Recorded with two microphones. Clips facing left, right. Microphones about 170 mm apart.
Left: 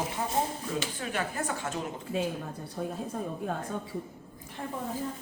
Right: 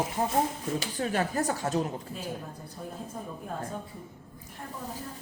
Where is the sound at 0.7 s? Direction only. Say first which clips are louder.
Right 4 dB; 40° right (ahead or behind).